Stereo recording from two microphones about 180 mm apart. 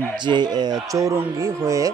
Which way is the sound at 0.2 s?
25° right (ahead or behind).